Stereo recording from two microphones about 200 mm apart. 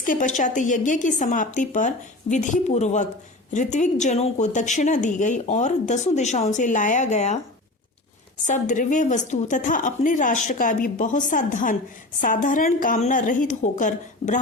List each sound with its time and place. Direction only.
0.0 s speech: 40° left (ahead or behind)
8.4 s speech: 40° left (ahead or behind)